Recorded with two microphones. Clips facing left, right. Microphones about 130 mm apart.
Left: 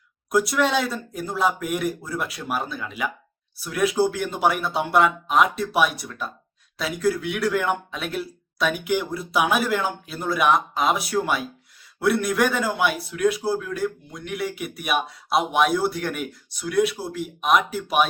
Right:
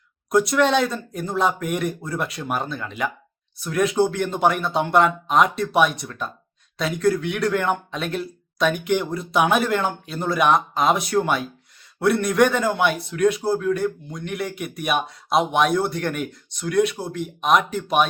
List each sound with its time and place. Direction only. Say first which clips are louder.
0.3 s a man's voice: right 3 dB; 5° left (ahead or behind)